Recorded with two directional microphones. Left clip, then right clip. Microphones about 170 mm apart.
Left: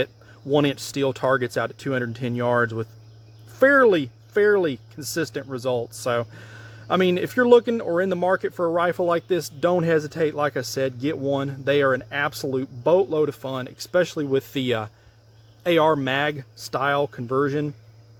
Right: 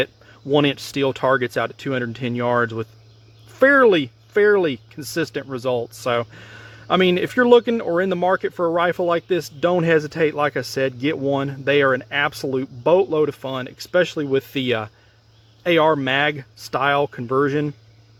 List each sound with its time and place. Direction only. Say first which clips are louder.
0.5 s speech: right 3 dB; 15° right (ahead or behind)
3.5 s speech: right 2 dB; 25° right (ahead or behind); by 9.7 s 10° right (ahead or behind)
9.7 s speech: right 5 dB; 25° right (ahead or behind)
12.3 s speech: right 2 dB; 10° right (ahead or behind)
12.5 s speech: right 2 dB; 20° right (ahead or behind)